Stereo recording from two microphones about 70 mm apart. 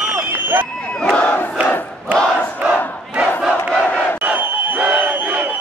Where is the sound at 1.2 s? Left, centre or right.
Left.